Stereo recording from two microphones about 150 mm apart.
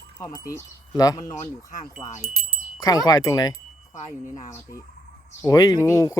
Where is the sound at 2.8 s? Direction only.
25° left (ahead or behind).